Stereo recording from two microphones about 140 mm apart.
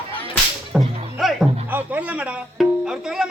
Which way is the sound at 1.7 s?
10° right (ahead or behind).